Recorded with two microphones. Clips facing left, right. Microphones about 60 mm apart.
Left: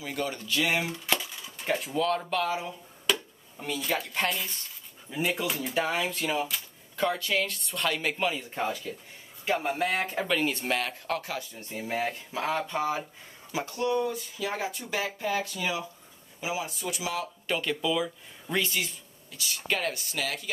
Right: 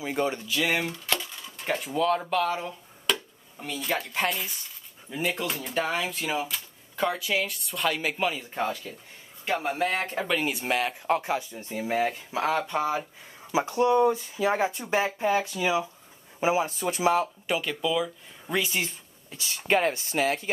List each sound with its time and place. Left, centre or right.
0.0 s speech: right
0.5 s speech: centre
13.5 s speech: right
16.3 s speech: right
17.5 s speech: centre
18.7 s speech: right